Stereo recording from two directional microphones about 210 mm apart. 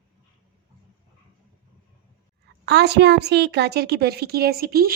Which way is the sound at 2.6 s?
55° right (ahead or behind).